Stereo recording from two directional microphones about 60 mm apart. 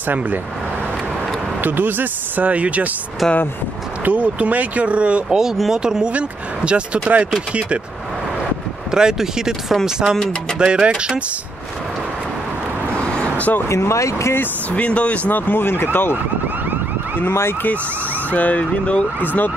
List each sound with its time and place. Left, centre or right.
1.6 s speech: right
3.2 s speech: centre
4.0 s speech: right
8.9 s speech: centre
12.9 s vehicle: centre
13.7 s speech: left
14.3 s speech: left
14.8 s speech: left
17.2 s speech: left
18.3 s speech: left